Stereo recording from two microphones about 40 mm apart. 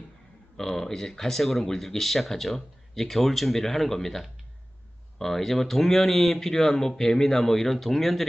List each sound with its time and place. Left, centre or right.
0.8 s speech: centre